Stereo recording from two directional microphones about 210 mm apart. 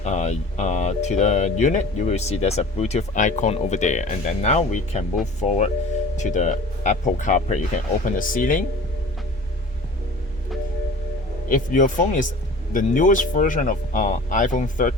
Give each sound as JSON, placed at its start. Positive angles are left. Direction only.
{"t": 0.0, "sound": "speech", "side_deg": 35}
{"t": 11.4, "sound": "speech", "side_deg": 40}